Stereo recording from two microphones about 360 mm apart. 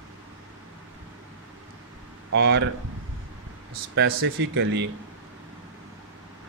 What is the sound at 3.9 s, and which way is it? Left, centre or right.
Speech, right.